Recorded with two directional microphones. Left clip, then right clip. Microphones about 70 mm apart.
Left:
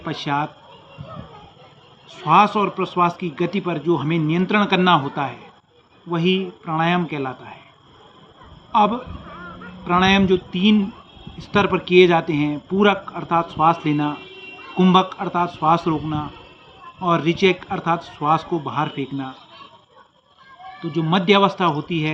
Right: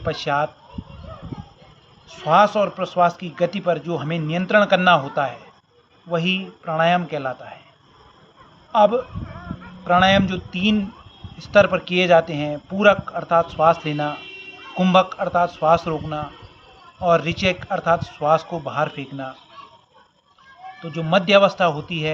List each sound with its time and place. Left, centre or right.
0.0 s a man's voice: right
2.0 s a man's voice: right
8.7 s a man's voice: right
20.9 s a man's voice: right